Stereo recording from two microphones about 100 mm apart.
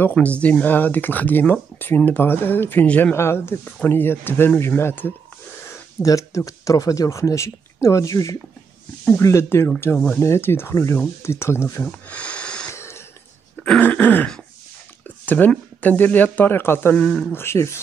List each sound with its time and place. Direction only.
0.0 s speech: 15° left (ahead or behind)
11.8 s wheeze: 10° left (ahead or behind)
12.7 s a sound: 25° left (ahead or behind)
13.7 s throat clearing: 15° left (ahead or behind)
15.0 s speech: 15° left (ahead or behind)
16.9 s speech: 5° left (ahead or behind)
17.3 s speech: 25° left (ahead or behind)